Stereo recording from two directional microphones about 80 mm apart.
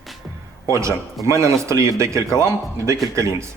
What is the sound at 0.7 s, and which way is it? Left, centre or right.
Speech, right.